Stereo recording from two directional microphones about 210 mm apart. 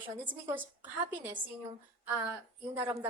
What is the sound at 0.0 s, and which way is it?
Speech, 10° right (ahead or behind).